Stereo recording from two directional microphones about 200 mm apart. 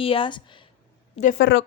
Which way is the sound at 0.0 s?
25° left (ahead or behind).